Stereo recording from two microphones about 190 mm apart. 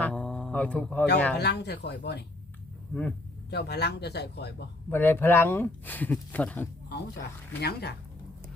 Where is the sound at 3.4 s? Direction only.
60° left (ahead or behind).